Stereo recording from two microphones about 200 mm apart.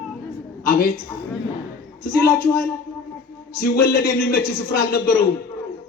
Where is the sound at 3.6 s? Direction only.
45° left (ahead or behind).